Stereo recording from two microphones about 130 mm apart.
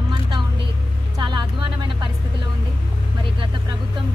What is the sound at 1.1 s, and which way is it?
Speech, 35° right (ahead or behind).